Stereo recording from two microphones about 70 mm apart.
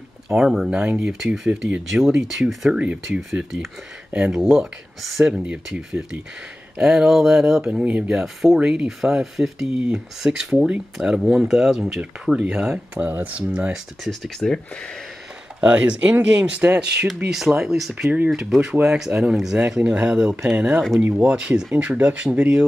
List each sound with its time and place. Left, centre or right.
0.4 s speech: centre
3.1 s speech: centre
5.2 s speech: centre
14.0 s speech: centre
15.6 s speech: centre
17.3 s speech: centre
18.1 s speech: centre